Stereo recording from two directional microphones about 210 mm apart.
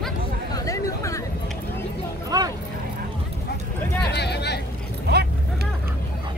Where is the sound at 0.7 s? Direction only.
15° left (ahead or behind).